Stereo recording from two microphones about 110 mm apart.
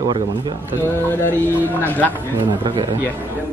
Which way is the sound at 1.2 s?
20° left (ahead or behind).